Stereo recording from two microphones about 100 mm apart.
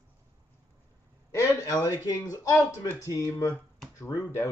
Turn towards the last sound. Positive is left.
turn(degrees=35)  # may be behind; listen again after turning